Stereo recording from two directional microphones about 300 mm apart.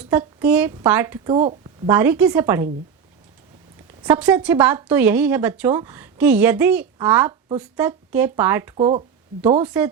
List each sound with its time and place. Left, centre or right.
0.0 s speech: centre
1.9 s speech: centre
4.0 s speech: centre
8.7 s speech: centre
9.6 s speech: centre